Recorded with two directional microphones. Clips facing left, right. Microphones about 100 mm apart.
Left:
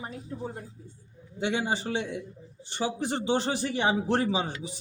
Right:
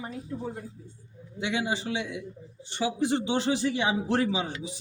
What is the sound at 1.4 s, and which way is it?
Speech, 35° left (ahead or behind).